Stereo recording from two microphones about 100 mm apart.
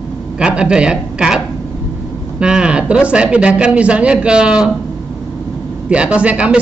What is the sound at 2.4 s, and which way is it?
Speech, 10° right (ahead or behind).